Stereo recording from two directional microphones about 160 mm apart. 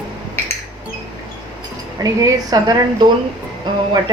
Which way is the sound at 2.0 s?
25° right (ahead or behind).